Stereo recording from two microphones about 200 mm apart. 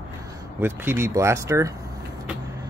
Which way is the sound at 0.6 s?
10° right (ahead or behind).